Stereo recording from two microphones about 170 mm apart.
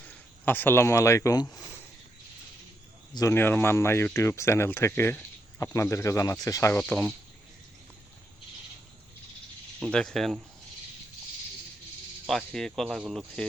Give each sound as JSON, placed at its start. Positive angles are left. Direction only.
{"t": 0.0, "sound": "speech", "side_deg": 10}
{"t": 3.2, "sound": "speech", "side_deg": 15}
{"t": 9.8, "sound": "speech", "side_deg": 5}
{"t": 12.2, "sound": "speech", "side_deg": 5}